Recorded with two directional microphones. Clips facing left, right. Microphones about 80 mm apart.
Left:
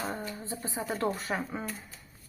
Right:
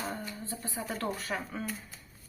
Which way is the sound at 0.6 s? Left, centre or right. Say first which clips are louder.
Left 4 dB; centre.